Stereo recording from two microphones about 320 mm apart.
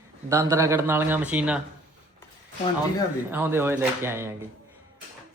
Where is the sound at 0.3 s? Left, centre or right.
Centre.